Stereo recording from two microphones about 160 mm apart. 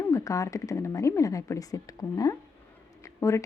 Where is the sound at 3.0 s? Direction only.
20° left (ahead or behind).